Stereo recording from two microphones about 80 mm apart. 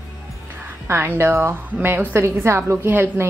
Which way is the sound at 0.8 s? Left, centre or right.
Right.